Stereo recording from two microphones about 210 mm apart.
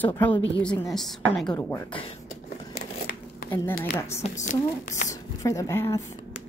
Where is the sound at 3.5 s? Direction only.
10° left (ahead or behind).